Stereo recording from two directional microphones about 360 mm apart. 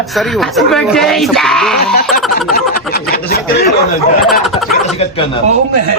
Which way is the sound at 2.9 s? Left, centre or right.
Left.